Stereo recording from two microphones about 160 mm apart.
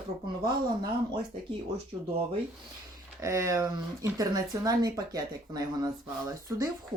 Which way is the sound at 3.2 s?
20° right (ahead or behind).